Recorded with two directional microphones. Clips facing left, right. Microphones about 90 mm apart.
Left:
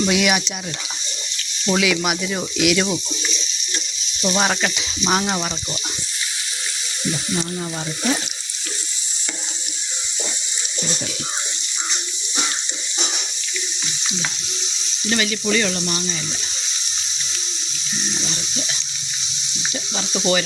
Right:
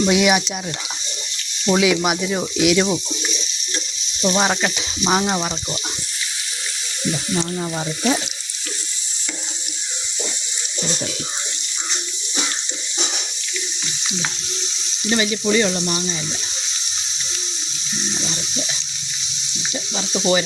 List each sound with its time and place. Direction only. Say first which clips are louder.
0.0 s speech: right 3 dB; 20° right (ahead or behind)
1.6 s speech: right 3 dB; 20° right (ahead or behind)
2.7 s frying: right 3 dB; 15° right (ahead or behind)
4.4 s frying: even; 5° right (ahead or behind)
15.0 s frying: right 2 dB; 15° right (ahead or behind)
18.1 s water: right 2 dB; 15° right (ahead or behind)
20.0 s speech: right 1 dB; centre (ahead or behind)